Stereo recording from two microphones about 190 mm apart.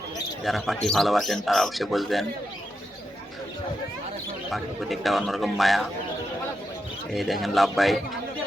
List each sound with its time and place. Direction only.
0.4 s speech: centre (ahead or behind)
4.5 s speech: centre (ahead or behind)
7.1 s speech: centre (ahead or behind)